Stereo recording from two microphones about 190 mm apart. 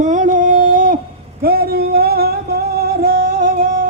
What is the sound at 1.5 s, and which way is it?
Singing, 55° right (ahead or behind).